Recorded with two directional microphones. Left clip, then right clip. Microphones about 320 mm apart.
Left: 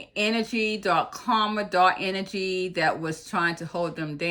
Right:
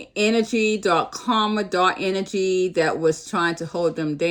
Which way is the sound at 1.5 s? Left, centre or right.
Centre.